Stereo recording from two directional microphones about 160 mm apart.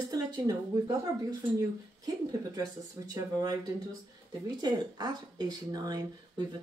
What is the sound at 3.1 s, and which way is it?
Speech, 25° right (ahead or behind).